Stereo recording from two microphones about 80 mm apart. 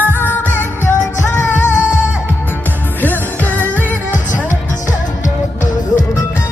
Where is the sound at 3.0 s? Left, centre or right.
Left.